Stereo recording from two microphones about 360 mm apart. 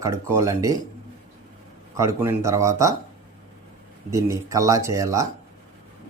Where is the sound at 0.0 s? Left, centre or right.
Centre.